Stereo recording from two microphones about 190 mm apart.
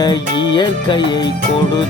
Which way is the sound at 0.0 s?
25° left (ahead or behind).